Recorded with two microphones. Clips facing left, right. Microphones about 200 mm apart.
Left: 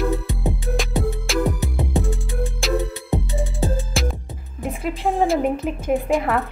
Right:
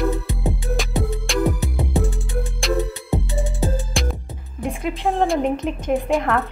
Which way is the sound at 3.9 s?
Centre (ahead or behind).